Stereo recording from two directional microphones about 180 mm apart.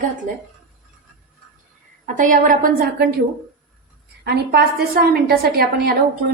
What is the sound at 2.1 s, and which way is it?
A woman's voice, 45° right (ahead or behind).